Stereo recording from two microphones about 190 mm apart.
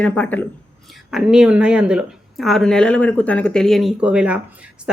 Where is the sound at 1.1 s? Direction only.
5° right (ahead or behind).